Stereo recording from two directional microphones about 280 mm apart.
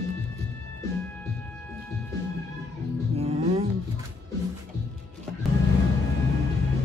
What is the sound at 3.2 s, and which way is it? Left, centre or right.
Music, right.